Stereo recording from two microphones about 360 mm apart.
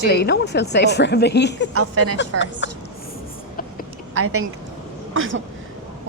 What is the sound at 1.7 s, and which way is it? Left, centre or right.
Speech, right.